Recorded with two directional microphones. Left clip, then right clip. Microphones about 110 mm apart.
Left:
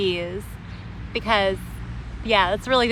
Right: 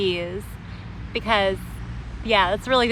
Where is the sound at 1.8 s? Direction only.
50° right (ahead or behind).